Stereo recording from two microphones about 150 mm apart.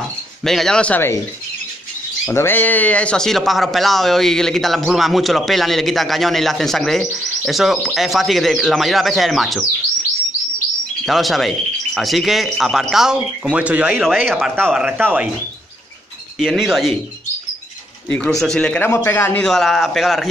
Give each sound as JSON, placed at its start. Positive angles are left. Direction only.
{"t": 0.4, "sound": "speech", "side_deg": 5}
{"t": 2.2, "sound": "speech", "side_deg": 15}
{"t": 11.1, "sound": "a man's voice", "side_deg": 0}
{"t": 16.3, "sound": "speech", "side_deg": -5}
{"t": 18.0, "sound": "speech", "side_deg": 5}